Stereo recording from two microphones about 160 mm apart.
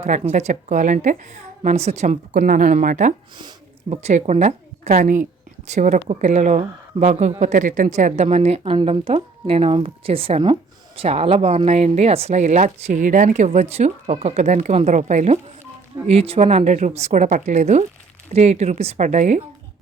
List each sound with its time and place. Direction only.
0.0 s a woman's voice: 45° right (ahead or behind)
3.3 s a woman's voice: 30° right (ahead or behind); by 19.4 s 50° right (ahead or behind)